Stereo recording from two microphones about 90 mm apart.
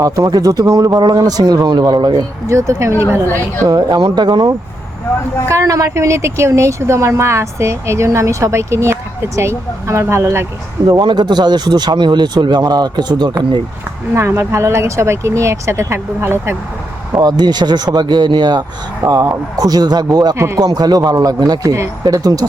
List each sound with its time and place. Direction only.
0.0 s speech: 45° right (ahead or behind)
2.5 s speech: 35° right (ahead or behind)
3.7 s speech: 45° right (ahead or behind)
5.5 s speech: 35° right (ahead or behind)
10.8 s speech: 50° right (ahead or behind)
14.1 s speech: 30° right (ahead or behind)
17.1 s speech: 45° right (ahead or behind)
20.3 s speech: 30° right (ahead or behind)
20.6 s speech: 45° right (ahead or behind)